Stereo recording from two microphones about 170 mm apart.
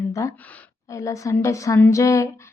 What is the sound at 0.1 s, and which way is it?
A woman's voice, 20° left (ahead or behind).